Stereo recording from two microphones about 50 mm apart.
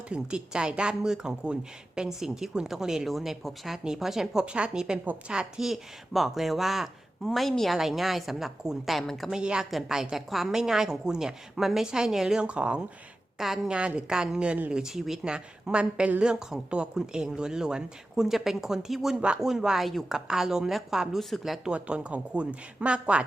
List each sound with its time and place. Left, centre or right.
0.1 s a woman's voice: centre
4.4 s a woman's voice: right; by 6.9 s centre
7.3 s speech: centre
9.3 s a woman's voice: centre
12.4 s a woman's voice: right
18.2 s a woman's voice: centre
20.1 s a woman's voice: centre
21.2 s speech: centre
21.6 s a woman's voice: right